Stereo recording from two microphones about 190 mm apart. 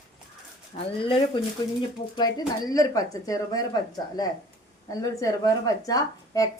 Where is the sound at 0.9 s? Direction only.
25° left (ahead or behind).